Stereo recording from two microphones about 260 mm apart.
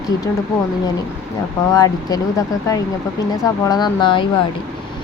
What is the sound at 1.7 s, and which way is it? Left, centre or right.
Speech, centre.